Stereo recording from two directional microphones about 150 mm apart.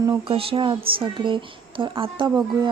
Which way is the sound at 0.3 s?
35° right (ahead or behind).